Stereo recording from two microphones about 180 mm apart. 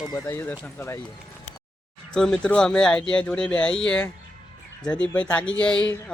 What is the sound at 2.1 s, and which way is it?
Speech, 5° left (ahead or behind).